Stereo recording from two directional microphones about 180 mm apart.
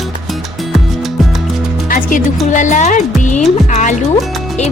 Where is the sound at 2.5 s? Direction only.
45° left (ahead or behind).